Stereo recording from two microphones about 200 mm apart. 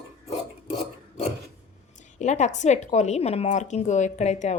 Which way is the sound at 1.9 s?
35° left (ahead or behind).